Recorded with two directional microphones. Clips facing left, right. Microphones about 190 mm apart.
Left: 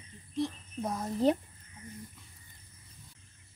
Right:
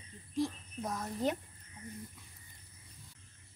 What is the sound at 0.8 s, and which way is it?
Speech, 30° left (ahead or behind).